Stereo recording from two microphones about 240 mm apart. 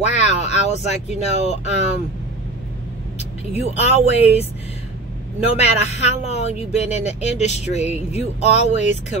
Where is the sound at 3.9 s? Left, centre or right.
Left.